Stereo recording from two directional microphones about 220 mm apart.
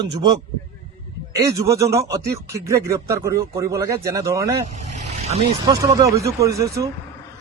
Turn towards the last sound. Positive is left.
turn(degrees=-15)  # may be behind; listen again after turning